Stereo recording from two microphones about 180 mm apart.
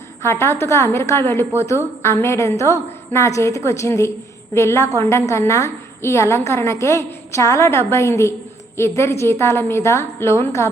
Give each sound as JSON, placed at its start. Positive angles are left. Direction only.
{"t": 0.2, "sound": "a woman's voice", "side_deg": 15}